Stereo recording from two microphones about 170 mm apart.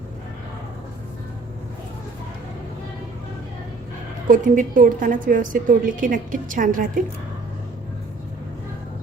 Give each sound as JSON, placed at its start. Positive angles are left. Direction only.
{"t": 4.3, "sound": "a woman's voice", "side_deg": -50}